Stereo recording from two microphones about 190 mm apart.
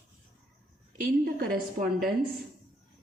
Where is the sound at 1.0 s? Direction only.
50° right (ahead or behind).